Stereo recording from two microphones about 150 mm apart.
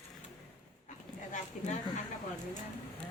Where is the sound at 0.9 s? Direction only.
55° left (ahead or behind).